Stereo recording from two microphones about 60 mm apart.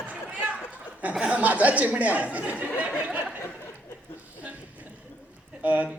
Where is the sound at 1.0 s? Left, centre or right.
Centre.